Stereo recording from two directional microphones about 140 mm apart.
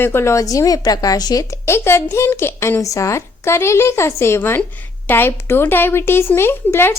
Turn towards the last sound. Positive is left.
turn(degrees=15)  # may be behind; listen again after turning